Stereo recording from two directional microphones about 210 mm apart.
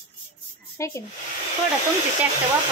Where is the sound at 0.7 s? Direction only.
15° left (ahead or behind).